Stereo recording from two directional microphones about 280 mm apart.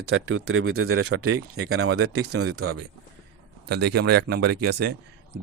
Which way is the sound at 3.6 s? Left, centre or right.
Right.